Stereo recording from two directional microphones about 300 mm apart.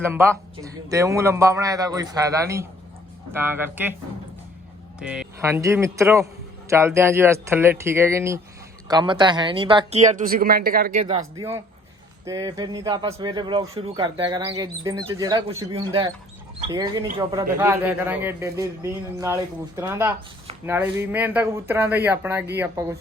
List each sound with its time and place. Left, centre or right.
0.0 s speech: centre
4.9 s speech: centre; by 11.0 s right
11.0 s speech: centre